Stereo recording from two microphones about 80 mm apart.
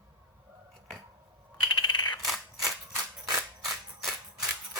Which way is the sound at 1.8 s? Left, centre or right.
Left.